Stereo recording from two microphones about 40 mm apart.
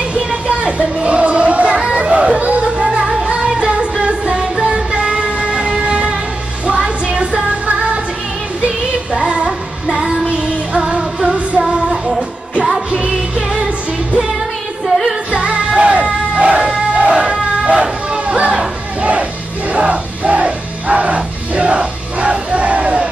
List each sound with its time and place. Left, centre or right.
0.3 s a sound: right
2.0 s music: right
9.1 s child singing: right
9.8 s music: centre
15.3 s music: right
17.0 s a sound: right
18.9 s music: right
19.7 s a sound: right
20.8 s music: right